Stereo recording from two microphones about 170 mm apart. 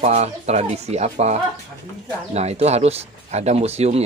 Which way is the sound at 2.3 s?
40° right (ahead or behind).